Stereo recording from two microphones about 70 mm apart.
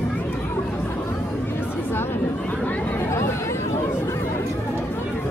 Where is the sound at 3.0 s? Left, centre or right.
Left.